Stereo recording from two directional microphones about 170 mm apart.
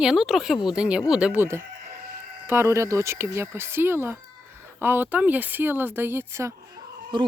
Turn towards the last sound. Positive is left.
turn(degrees=-25)  # may be behind; listen again after turning